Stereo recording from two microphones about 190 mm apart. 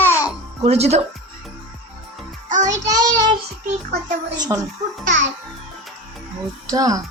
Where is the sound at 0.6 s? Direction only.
35° right (ahead or behind).